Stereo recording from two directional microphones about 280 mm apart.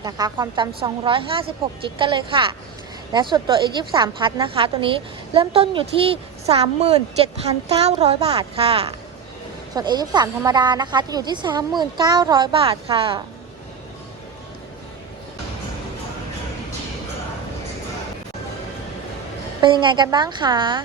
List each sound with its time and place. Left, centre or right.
0.0 s a woman's voice: centre
19.6 s speech: centre